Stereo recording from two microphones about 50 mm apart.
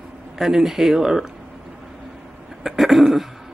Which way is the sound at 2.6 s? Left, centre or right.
Centre.